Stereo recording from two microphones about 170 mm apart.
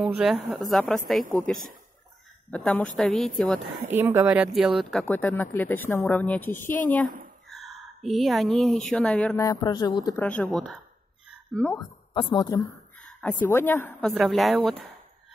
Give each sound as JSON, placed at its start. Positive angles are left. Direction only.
{"t": 0.0, "sound": "a woman's voice", "side_deg": -5}
{"t": 3.8, "sound": "speech", "side_deg": -10}
{"t": 5.0, "sound": "a woman's voice", "side_deg": 10}
{"t": 7.4, "sound": "speech", "side_deg": 0}
{"t": 9.4, "sound": "speech", "side_deg": 20}
{"t": 10.1, "sound": "a woman's voice", "side_deg": 10}
{"t": 12.1, "sound": "speech", "side_deg": 30}
{"t": 13.0, "sound": "a woman's voice", "side_deg": 10}
{"t": 14.1, "sound": "a woman's voice", "side_deg": 0}